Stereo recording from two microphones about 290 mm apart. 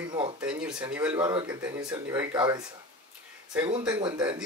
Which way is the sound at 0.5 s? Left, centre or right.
Centre.